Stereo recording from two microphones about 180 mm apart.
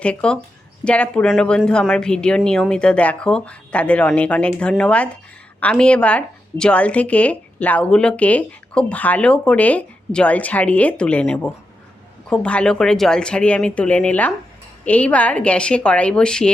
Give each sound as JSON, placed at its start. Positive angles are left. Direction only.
{"t": 0.0, "sound": "speech", "side_deg": 5}